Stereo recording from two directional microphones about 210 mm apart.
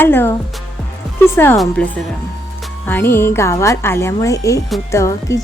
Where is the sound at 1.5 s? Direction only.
Centre (ahead or behind).